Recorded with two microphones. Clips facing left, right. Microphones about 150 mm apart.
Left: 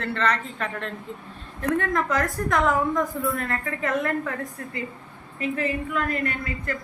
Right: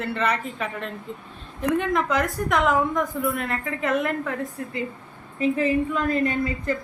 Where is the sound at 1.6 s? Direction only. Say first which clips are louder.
Right 1 dB; 20° right (ahead or behind).